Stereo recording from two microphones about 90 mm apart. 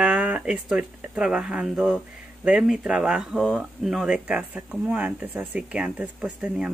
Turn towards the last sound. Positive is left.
turn(degrees=-10)  # may be behind; listen again after turning